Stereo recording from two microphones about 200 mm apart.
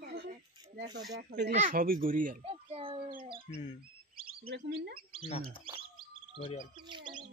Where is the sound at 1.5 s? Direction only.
35° right (ahead or behind).